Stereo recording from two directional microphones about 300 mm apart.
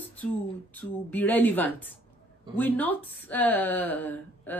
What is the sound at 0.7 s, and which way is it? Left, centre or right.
Speech, centre.